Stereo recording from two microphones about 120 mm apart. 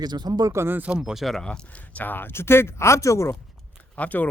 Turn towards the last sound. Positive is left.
turn(degrees=15)  # may be behind; listen again after turning